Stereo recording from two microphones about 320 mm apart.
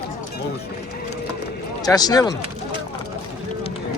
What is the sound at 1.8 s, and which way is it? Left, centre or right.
Speech, centre.